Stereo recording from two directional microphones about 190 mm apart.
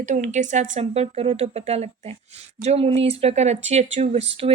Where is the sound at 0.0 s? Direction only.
40° right (ahead or behind).